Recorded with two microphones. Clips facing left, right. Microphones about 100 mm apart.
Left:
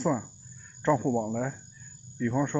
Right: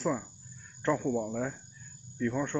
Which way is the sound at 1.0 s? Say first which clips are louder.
Left 3 dB; 20° left (ahead or behind).